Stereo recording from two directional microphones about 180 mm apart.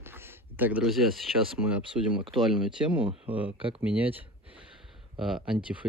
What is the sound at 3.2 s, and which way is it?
Speech, 10° right (ahead or behind).